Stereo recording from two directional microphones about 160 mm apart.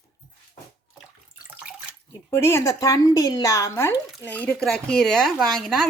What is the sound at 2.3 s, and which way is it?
A woman's voice, 15° left (ahead or behind).